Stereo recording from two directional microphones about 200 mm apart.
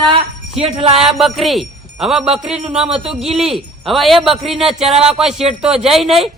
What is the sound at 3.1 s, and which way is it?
A man's voice, centre (ahead or behind).